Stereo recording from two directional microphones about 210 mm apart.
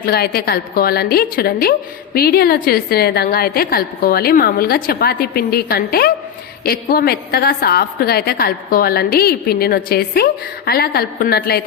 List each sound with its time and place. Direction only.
0.0 s a woman's voice: 50° left (ahead or behind)